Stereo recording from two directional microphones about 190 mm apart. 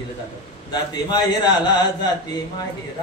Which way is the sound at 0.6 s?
20° left (ahead or behind).